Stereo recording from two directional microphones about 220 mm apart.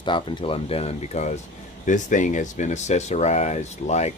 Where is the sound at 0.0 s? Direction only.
20° left (ahead or behind).